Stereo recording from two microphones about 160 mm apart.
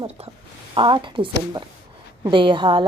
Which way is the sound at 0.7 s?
30° right (ahead or behind).